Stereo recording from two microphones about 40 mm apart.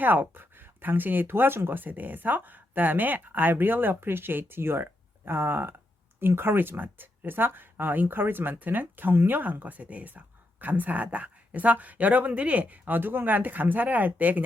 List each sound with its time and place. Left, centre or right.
0.0 s speech: right
1.8 s speech: right
6.8 s speech: right
7.3 s speech: right
13.0 s speech: right